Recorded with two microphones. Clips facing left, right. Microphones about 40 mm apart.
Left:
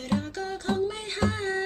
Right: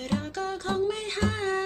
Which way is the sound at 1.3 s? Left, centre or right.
Right.